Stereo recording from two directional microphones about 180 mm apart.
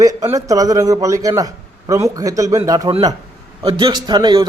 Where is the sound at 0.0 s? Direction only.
20° right (ahead or behind).